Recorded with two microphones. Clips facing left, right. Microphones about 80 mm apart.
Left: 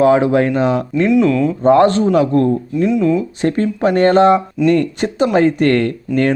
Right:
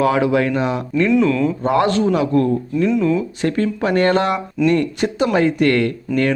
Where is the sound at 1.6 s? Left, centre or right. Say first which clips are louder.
Left 7 dB; left.